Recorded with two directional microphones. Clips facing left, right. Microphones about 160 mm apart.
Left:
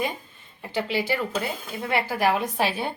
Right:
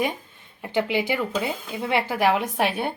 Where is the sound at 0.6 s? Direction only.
15° right (ahead or behind).